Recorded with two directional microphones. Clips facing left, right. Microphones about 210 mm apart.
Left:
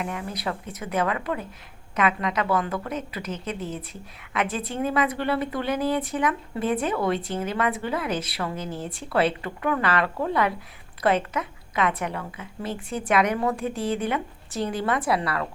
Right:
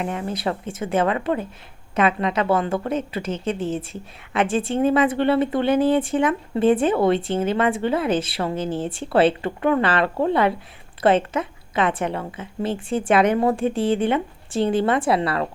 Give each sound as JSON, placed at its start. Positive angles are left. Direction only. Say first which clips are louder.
{"t": 0.0, "sound": "a woman's voice", "louder": "right 5 dB", "side_deg": -30}